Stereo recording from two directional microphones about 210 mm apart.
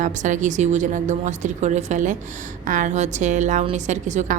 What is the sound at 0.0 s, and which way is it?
A woman's voice, 35° right (ahead or behind).